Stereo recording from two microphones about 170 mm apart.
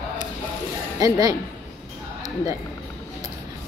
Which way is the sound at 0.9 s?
20° right (ahead or behind).